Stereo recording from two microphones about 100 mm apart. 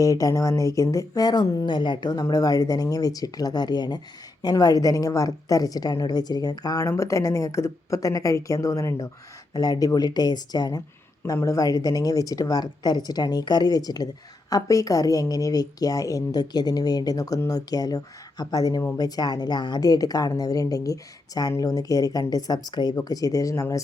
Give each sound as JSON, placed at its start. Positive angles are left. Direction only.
{"t": 0.0, "sound": "a woman's voice", "side_deg": 35}